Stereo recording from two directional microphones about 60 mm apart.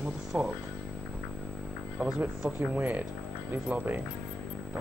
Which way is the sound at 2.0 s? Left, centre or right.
Right.